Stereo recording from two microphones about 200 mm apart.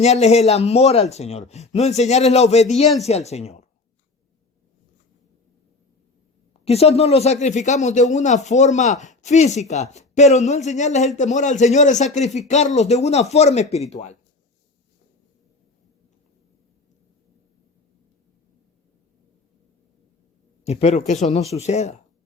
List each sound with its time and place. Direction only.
0.0 s speech: 35° left (ahead or behind)
6.5 s speech: 30° left (ahead or behind)
20.7 s speech: 30° left (ahead or behind)